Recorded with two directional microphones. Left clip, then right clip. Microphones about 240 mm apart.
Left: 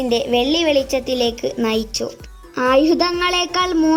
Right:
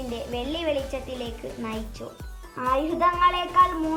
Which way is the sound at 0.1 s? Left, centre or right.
Left.